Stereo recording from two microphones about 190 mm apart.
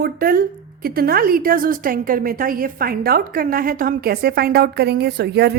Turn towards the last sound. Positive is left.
turn(degrees=-60)  # may be behind; listen again after turning